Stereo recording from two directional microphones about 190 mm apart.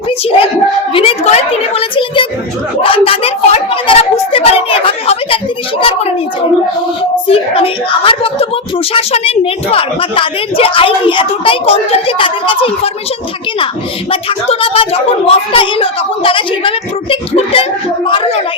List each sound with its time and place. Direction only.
0.3 s a woman's voice: 30° left (ahead or behind)
2.8 s a sound: 30° left (ahead or behind)
7.3 s a woman's voice: 30° left (ahead or behind)
14.1 s a woman's voice: 30° left (ahead or behind)